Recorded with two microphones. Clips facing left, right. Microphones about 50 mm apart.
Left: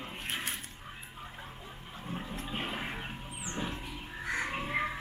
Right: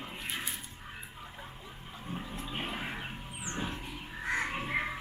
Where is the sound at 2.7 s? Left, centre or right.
Centre.